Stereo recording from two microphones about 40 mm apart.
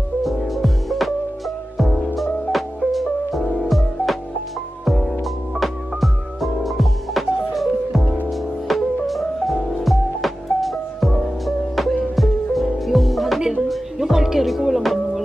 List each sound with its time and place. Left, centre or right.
0.2 s music: centre
2.1 s music: centre
14.6 s music: centre